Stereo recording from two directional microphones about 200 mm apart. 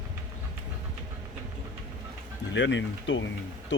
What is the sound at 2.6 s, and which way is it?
Speech, 65° left (ahead or behind).